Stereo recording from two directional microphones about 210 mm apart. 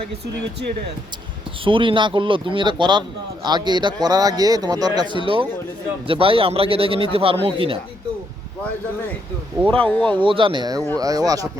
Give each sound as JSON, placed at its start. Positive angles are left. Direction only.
{"t": 1.6, "sound": "a man's voice", "side_deg": -25}
{"t": 9.6, "sound": "speech", "side_deg": 5}
{"t": 10.2, "sound": "a man's voice", "side_deg": -25}